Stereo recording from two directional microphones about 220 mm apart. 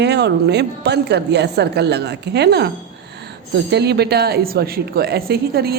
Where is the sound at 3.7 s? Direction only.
50° right (ahead or behind).